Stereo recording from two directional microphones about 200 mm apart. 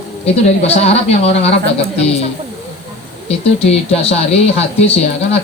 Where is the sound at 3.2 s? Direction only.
30° left (ahead or behind).